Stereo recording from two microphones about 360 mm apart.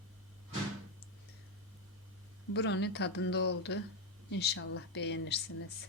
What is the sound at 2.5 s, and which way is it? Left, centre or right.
Speech, left.